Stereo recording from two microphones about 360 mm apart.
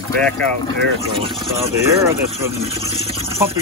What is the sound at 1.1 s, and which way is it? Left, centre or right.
Speech, centre.